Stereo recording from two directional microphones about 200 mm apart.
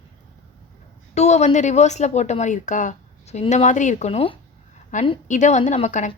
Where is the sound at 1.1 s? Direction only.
35° left (ahead or behind).